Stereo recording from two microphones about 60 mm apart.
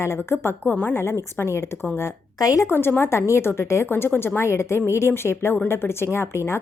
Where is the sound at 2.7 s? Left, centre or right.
Left.